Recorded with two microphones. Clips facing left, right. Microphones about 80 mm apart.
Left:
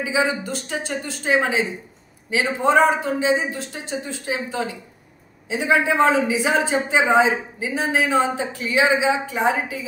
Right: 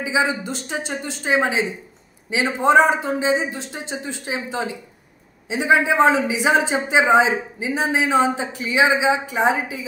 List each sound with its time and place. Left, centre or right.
0.0 s a man's voice: right